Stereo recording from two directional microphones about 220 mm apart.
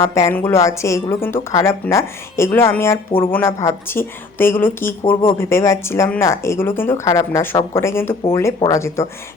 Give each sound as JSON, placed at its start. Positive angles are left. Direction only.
{"t": 0.0, "sound": "speech", "side_deg": 15}
{"t": 3.1, "sound": "speech", "side_deg": 25}
{"t": 3.3, "sound": "speech", "side_deg": 10}